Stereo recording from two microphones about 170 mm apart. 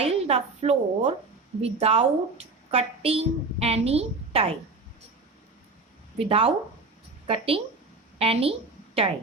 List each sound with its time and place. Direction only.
0.0 s a woman's voice: 35° right (ahead or behind)
6.1 s a woman's voice: 35° right (ahead or behind)